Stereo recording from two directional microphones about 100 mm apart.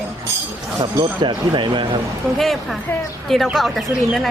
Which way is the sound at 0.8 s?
55° right (ahead or behind).